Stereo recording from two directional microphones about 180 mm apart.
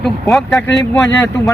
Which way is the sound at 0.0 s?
Centre (ahead or behind).